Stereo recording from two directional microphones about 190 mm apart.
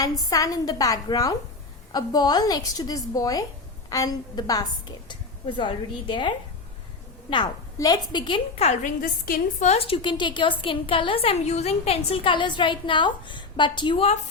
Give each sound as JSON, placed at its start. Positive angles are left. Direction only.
{"t": 0.3, "sound": "a woman's voice", "side_deg": 20}
{"t": 9.0, "sound": "a woman's voice", "side_deg": 50}